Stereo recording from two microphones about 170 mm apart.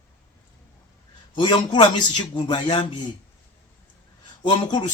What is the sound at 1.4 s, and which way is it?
A man's voice, 25° left (ahead or behind).